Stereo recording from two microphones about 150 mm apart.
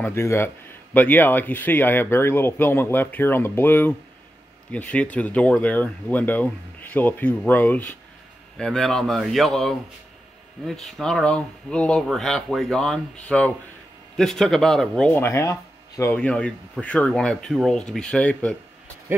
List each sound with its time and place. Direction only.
0.0 s speech: 15° left (ahead or behind)
15.2 s speech: 20° left (ahead or behind)